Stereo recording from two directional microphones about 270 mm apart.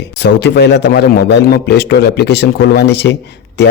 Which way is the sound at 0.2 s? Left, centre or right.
Left.